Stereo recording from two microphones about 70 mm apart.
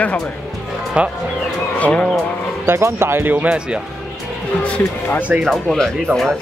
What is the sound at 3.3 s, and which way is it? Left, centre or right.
Speech, centre.